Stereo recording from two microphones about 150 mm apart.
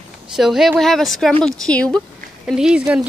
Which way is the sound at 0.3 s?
Centre (ahead or behind).